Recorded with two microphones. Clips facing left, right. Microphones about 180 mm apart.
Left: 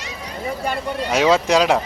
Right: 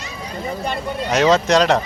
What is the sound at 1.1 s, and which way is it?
Speech, 5° left (ahead or behind).